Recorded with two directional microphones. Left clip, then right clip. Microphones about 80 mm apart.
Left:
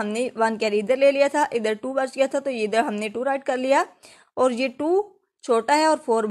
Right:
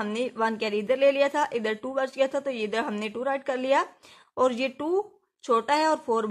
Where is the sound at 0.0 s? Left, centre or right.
Left.